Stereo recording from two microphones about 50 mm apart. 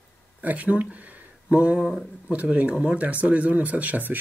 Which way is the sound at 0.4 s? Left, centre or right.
Right.